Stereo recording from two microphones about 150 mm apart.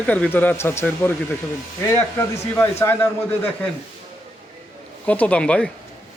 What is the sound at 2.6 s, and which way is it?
Speech, 15° left (ahead or behind).